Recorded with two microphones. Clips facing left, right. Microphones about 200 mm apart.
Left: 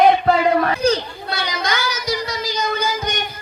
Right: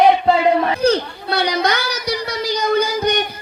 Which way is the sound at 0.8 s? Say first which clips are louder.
Right 2 dB; 60° right (ahead or behind).